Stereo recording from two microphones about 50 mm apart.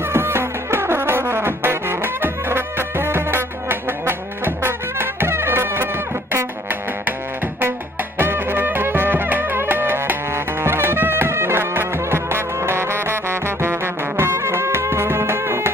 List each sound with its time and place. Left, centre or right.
0.1 s music: right
8.2 s music: right